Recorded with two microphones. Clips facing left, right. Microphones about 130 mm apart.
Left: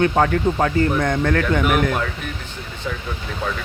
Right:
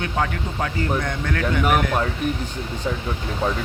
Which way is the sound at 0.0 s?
50° left (ahead or behind).